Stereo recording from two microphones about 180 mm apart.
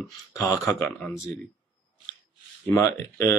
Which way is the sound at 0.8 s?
5° left (ahead or behind).